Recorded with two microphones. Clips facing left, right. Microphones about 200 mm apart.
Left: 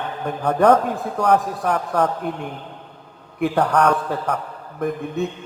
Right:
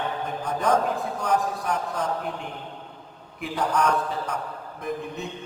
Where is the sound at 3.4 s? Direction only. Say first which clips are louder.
Left 7 dB; 60° left (ahead or behind).